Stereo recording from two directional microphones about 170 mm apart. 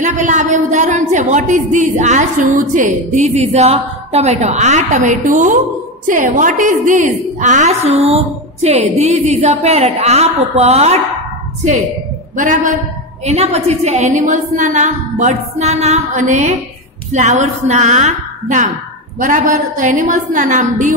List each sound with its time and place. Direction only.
0.0 s a woman's voice: 45° right (ahead or behind)
12.4 s a woman's voice: 50° right (ahead or behind)